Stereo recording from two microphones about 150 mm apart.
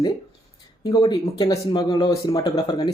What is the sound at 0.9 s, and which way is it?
Speech, 25° left (ahead or behind).